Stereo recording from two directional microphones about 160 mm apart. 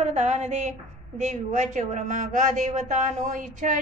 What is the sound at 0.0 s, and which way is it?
A woman's voice, 45° right (ahead or behind).